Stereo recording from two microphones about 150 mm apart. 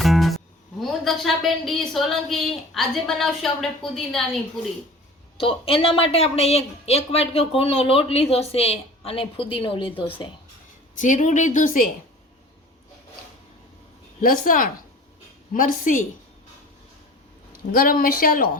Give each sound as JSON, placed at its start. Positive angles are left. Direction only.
{"t": 0.0, "sound": "music", "side_deg": 0}
{"t": 0.8, "sound": "speech", "side_deg": 0}
{"t": 5.4, "sound": "speech", "side_deg": 40}
{"t": 10.9, "sound": "a woman's voice", "side_deg": 55}
{"t": 14.2, "sound": "a woman's voice", "side_deg": 65}
{"t": 17.7, "sound": "speech", "side_deg": 70}